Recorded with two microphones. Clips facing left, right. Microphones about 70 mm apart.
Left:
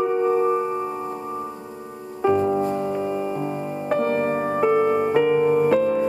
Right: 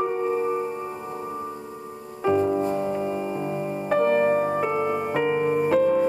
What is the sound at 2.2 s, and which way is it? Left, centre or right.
Music, centre.